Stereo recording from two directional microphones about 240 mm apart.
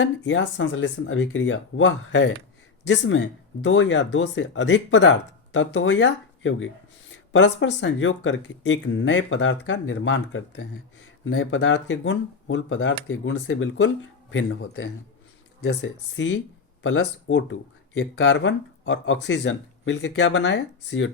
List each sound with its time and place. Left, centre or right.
0.0 s speech: left